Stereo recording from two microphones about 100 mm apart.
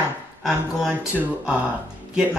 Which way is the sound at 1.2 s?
15° right (ahead or behind).